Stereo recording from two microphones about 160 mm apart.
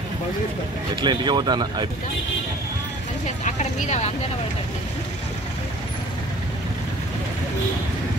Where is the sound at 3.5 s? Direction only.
45° left (ahead or behind).